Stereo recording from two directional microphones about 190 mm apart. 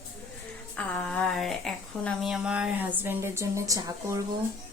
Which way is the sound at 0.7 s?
5° left (ahead or behind).